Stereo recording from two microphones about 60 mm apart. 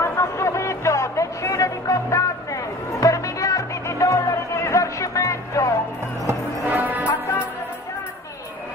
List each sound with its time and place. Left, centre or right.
0.0 s a sound: left
6.7 s music: right
7.1 s music: left